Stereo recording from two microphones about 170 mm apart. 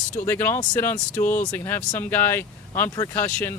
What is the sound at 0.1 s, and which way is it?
Speech, 15° left (ahead or behind).